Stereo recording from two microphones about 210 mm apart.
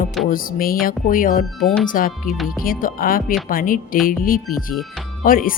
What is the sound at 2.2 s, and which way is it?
Speech, centre (ahead or behind).